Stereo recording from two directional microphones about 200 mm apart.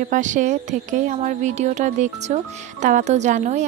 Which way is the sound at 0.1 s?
40° right (ahead or behind).